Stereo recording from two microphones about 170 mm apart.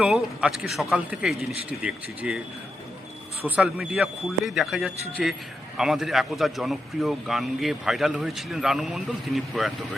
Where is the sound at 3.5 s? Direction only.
5° right (ahead or behind).